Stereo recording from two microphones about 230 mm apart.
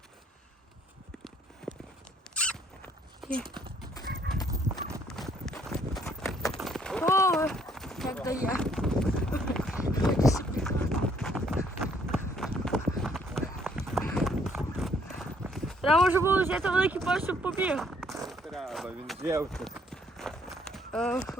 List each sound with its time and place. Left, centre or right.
1.6 s clip-clop: centre
2.3 s rodents: centre
4.0 s horse: right
5.0 s clip-clop: centre
9.6 s a sound: centre
10.6 s run: centre
14.1 s horse: centre
16.0 s speech: centre
18.3 s a sound: centre
19.2 s speech: centre
19.5 s run: centre